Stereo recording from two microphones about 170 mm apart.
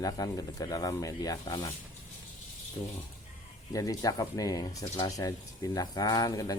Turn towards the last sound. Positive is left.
turn(degrees=20)  # may be behind; listen again after turning